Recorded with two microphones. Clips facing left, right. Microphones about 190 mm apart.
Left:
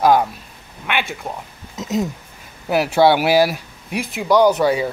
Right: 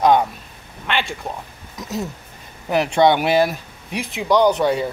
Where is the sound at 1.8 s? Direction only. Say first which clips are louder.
Left 5 dB; 20° left (ahead or behind).